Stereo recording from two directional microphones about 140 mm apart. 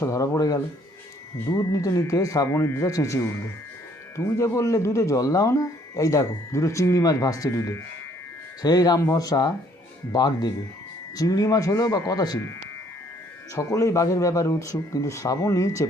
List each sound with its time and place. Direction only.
0.0 s speech: 25° left (ahead or behind)
13.6 s speech: 25° left (ahead or behind)